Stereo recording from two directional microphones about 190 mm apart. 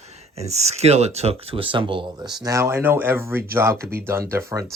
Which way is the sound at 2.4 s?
15° right (ahead or behind).